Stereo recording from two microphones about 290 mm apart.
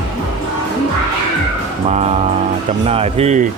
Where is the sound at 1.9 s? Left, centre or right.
Right.